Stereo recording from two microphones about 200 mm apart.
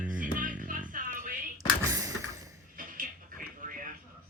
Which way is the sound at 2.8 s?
40° right (ahead or behind).